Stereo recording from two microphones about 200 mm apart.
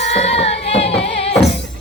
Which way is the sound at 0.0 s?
35° left (ahead or behind).